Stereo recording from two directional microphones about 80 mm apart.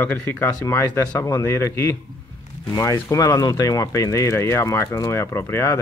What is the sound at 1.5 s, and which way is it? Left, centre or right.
Speech, left.